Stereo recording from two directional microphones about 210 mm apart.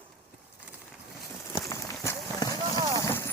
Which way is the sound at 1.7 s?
15° left (ahead or behind).